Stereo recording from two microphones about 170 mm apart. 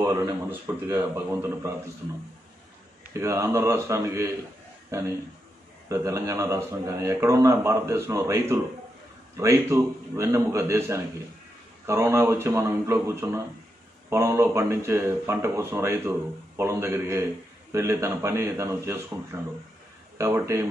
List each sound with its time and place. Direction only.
0.0 s speech: 15° right (ahead or behind)
3.1 s speech: 15° right (ahead or behind)
5.9 s speech: 15° right (ahead or behind)